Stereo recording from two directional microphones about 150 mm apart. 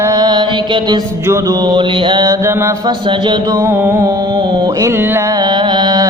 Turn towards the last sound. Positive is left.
turn(degrees=-30)  # may be behind; listen again after turning